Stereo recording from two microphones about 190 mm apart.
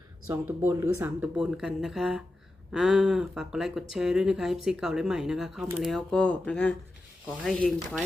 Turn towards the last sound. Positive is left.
turn(degrees=0)  # may be behind; listen again after turning